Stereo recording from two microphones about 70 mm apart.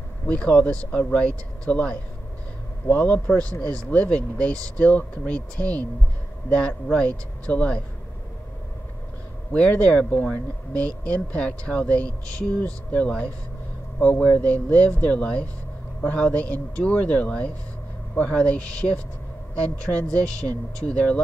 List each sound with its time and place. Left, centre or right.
0.3 s speech: centre
9.5 s speech: centre